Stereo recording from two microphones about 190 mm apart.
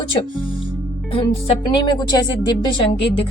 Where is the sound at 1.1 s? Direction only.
25° left (ahead or behind).